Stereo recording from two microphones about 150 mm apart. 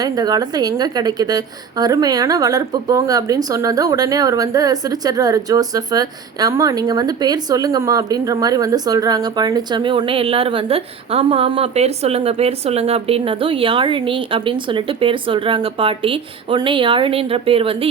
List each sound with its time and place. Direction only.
0.0 s a woman's voice: 25° right (ahead or behind)